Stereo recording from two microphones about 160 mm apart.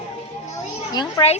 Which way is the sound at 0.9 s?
25° left (ahead or behind).